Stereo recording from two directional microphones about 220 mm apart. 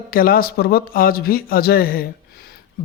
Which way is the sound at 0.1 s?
40° left (ahead or behind).